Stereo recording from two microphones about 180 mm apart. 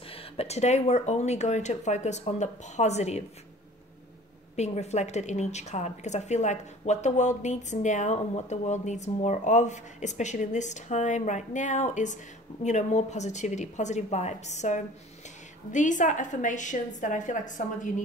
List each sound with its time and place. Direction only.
0.1 s a woman's voice: 30° left (ahead or behind)
4.6 s a woman's voice: 40° left (ahead or behind)